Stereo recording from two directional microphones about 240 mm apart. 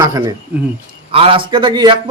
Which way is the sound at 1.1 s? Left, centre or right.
Right.